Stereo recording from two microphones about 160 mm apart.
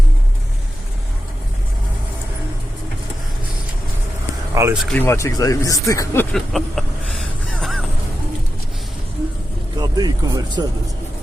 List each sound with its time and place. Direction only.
4.6 s speech: 20° right (ahead or behind)
4.9 s speech: 15° left (ahead or behind)
6.3 s vehicle: centre (ahead or behind)
9.7 s speech: 25° right (ahead or behind)